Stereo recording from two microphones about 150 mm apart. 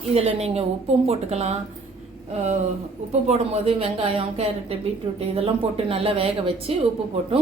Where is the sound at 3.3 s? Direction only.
45° right (ahead or behind).